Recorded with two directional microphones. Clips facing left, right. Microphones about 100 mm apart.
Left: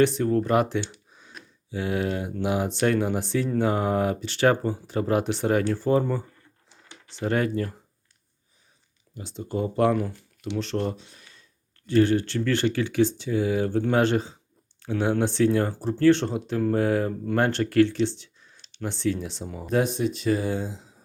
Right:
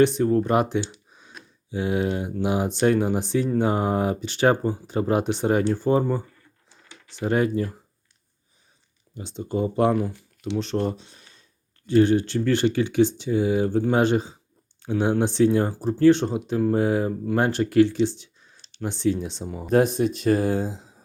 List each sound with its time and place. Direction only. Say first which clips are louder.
0.0 s speech: right 2 dB; 20° right (ahead or behind)
9.1 s speech: right 3 dB; 20° right (ahead or behind)
10.9 s a sound: right 2 dB; 25° right (ahead or behind)
11.9 s speech: right 2 dB; 20° right (ahead or behind)
19.7 s speech: right 4 dB; 45° right (ahead or behind)